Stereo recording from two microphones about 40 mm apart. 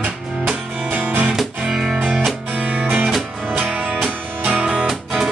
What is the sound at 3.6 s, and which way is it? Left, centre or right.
Music, right.